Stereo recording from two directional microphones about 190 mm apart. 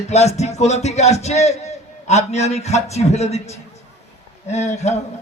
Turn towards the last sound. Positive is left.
turn(degrees=35)  # may be behind; listen again after turning